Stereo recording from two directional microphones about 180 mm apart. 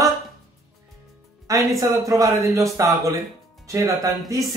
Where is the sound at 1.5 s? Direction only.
15° right (ahead or behind).